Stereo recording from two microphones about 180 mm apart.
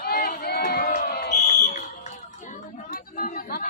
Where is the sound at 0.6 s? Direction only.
50° left (ahead or behind).